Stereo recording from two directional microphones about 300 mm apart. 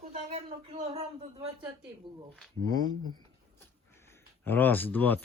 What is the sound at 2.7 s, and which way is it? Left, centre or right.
Speech, centre.